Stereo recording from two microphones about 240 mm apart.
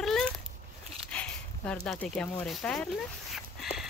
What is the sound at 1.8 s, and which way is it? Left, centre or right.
Speech, centre.